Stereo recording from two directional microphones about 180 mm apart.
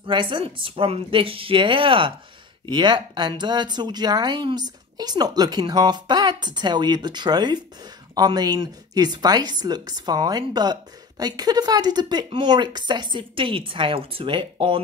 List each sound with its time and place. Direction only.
0.0 s speech: 25° right (ahead or behind)